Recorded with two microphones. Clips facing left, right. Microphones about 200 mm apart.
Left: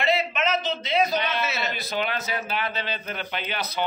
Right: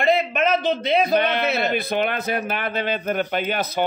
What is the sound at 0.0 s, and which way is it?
A man's voice, 50° right (ahead or behind).